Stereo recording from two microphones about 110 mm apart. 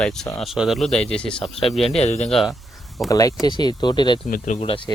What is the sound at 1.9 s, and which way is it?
Speech, 85° left.